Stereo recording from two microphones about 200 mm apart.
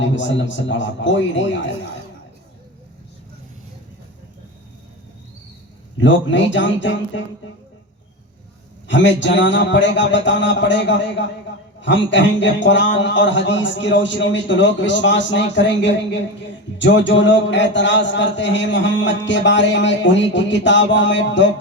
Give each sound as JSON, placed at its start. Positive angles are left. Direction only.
{"t": 0.0, "sound": "a man's voice", "side_deg": 65}
{"t": 6.0, "sound": "a man's voice", "side_deg": 65}
{"t": 8.9, "sound": "a man's voice", "side_deg": 65}